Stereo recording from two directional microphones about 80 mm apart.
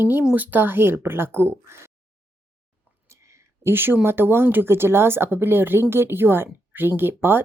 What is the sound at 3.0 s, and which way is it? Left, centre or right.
Speech, right.